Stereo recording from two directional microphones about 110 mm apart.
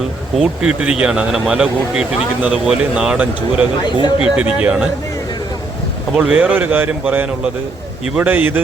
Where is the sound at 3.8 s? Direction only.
45° left (ahead or behind).